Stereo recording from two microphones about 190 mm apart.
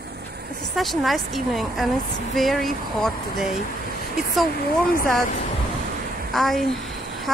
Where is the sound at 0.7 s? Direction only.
Centre (ahead or behind).